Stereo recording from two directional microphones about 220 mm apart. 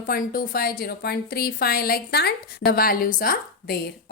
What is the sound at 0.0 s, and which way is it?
A woman's voice, 40° left (ahead or behind).